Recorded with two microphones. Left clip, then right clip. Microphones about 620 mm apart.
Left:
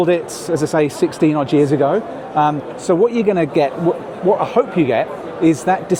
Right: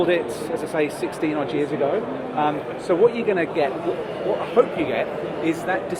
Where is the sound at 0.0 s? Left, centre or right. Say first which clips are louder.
Left 4 dB; left.